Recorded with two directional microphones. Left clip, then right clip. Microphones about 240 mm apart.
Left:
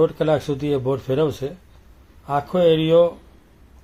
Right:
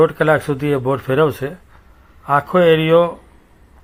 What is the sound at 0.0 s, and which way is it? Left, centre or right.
Speech, centre.